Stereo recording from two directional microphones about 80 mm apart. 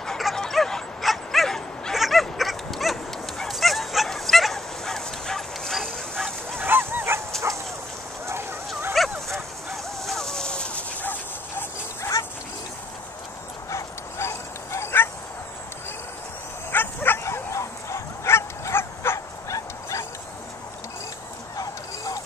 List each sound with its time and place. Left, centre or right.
0.0 s bow-wow: centre
6.6 s dog: right
8.3 s a sound: right
9.0 s dog: centre; by 11.6 s left
12.0 s dog: left
13.7 s bow-wow: left
16.7 s bow-wow: left
19.5 s dog: left
21.5 s a sound: left